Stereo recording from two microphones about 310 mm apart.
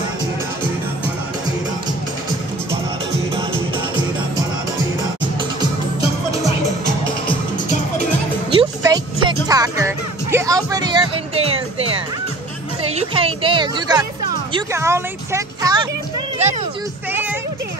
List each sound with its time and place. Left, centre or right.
8.5 s music: centre
12.9 s a woman's voice: centre
17.1 s music: centre